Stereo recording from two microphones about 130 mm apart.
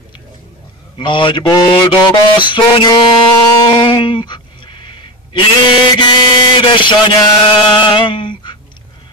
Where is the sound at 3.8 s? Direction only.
35° left (ahead or behind).